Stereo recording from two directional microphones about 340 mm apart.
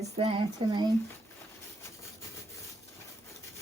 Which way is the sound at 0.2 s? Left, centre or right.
Centre.